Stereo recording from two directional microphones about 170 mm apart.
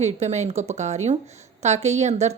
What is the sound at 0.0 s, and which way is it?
A woman's voice, 40° right (ahead or behind).